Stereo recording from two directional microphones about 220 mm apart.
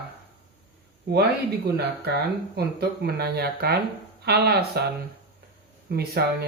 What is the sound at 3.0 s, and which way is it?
Speech, 45° right (ahead or behind).